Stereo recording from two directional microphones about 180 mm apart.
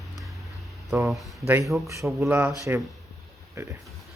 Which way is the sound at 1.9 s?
15° right (ahead or behind).